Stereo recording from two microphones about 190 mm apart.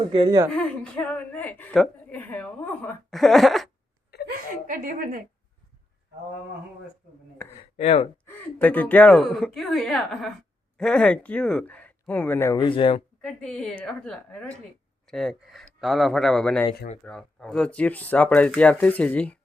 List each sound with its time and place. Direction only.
0.1 s a woman's voice: 25° right (ahead or behind)
0.5 s a woman's voice: 5° left (ahead or behind)
4.3 s speech: 45° right (ahead or behind)
7.6 s speech: 30° left (ahead or behind)
8.2 s a woman's voice: 10° left (ahead or behind); by 13.0 s 25° left (ahead or behind)
13.2 s a woman's voice: 5° left (ahead or behind)